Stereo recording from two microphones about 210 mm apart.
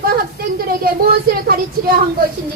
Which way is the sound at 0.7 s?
45° right (ahead or behind).